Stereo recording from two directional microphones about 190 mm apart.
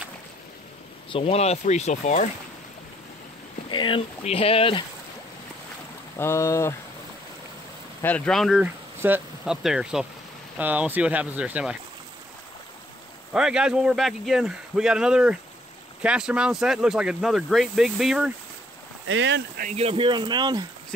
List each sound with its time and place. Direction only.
1.1 s speech: 30° left (ahead or behind)
3.7 s speech: 25° left (ahead or behind)
6.1 s speech: 15° left (ahead or behind)
8.0 s speech: 5° left (ahead or behind)
13.3 s speech: 5° right (ahead or behind)
19.0 s speech: 75° right (ahead or behind)
19.6 s speech: 35° right (ahead or behind)